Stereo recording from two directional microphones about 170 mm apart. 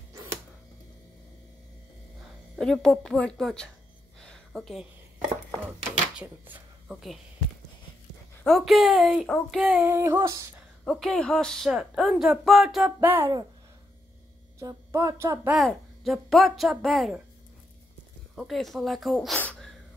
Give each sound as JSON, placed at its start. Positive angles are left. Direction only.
{"t": 2.6, "sound": "speech", "side_deg": 5}
{"t": 4.2, "sound": "a sound", "side_deg": 0}
{"t": 6.2, "sound": "speech", "side_deg": -10}
{"t": 8.5, "sound": "speech", "side_deg": 0}
{"t": 9.8, "sound": "speech", "side_deg": -15}
{"t": 10.9, "sound": "speech", "side_deg": 5}
{"t": 14.6, "sound": "speech", "side_deg": -20}
{"t": 15.5, "sound": "speech", "side_deg": 0}
{"t": 18.3, "sound": "speech", "side_deg": 0}
{"t": 19.3, "sound": "a sound", "side_deg": 10}